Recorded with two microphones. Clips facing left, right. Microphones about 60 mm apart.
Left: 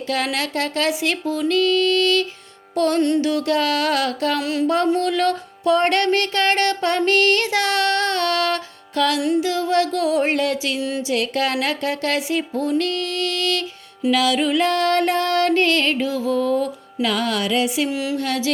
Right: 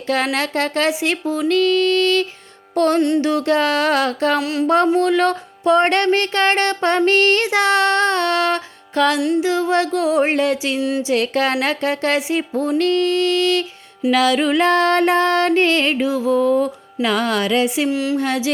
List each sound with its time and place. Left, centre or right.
0.1 s music: right
0.9 s music: right
1.5 s music: right
4.4 s music: centre
4.9 s music: right
10.8 s music: centre
11.0 s music: right
14.1 s music: right
17.8 s music: centre
18.2 s music: right